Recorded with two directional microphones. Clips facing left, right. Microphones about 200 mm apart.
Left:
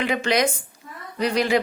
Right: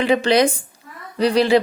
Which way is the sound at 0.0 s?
30° right (ahead or behind).